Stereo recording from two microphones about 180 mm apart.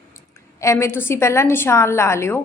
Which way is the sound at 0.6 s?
15° left (ahead or behind).